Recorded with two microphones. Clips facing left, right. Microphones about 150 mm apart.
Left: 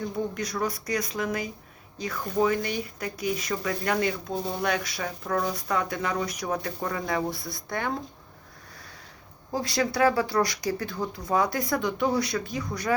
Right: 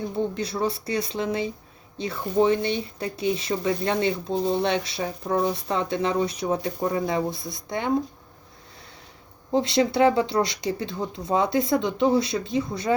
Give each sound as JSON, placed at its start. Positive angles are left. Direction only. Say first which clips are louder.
{"t": 0.3, "sound": "speech", "louder": "right 3 dB", "side_deg": -30}
{"t": 9.5, "sound": "speech", "louder": "right 6 dB", "side_deg": -25}